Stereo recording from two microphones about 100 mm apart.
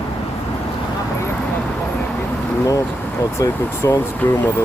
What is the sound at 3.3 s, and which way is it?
Speech, 30° left (ahead or behind).